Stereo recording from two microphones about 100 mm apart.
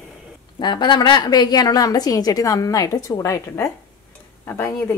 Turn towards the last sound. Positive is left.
turn(degrees=25)  # may be behind; listen again after turning